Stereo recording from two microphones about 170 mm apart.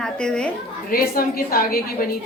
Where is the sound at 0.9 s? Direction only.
60° left (ahead or behind).